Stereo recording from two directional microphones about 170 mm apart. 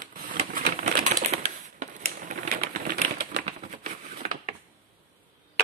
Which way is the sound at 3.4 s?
40° right (ahead or behind).